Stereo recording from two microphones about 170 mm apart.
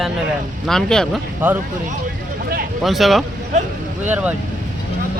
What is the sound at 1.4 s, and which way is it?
Speech, 10° right (ahead or behind).